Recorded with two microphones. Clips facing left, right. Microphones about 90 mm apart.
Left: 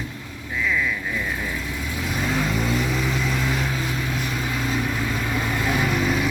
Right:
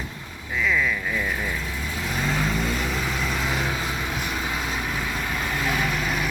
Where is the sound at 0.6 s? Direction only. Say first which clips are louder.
Right 1 dB; 5° left (ahead or behind).